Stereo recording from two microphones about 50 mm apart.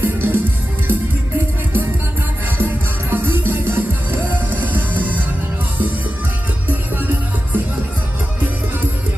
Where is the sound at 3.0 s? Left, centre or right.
Right.